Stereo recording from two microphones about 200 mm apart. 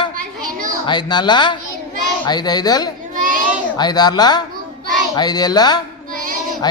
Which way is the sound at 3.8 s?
20° left (ahead or behind).